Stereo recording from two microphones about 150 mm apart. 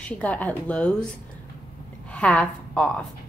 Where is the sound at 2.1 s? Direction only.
10° left (ahead or behind).